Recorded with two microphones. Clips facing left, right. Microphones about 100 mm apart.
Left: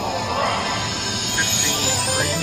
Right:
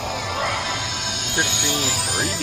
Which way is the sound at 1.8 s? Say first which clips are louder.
Left 2 dB; 35° left (ahead or behind).